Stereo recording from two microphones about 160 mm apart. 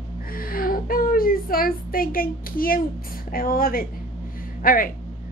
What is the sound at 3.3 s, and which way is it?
A woman's voice, 65° left (ahead or behind).